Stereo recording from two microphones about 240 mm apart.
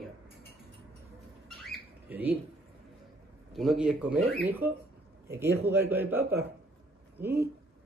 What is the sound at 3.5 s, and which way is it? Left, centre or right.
A man's voice, centre.